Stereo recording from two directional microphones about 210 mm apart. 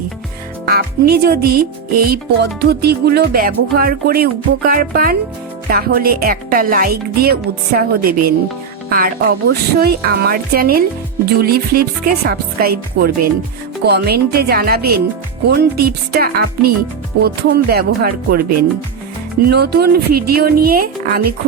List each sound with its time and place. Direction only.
0.6 s music: 50° right (ahead or behind)
19.5 s music: 50° right (ahead or behind)